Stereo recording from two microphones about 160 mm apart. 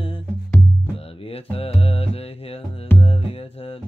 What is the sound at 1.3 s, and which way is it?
Mantra, 35° left (ahead or behind).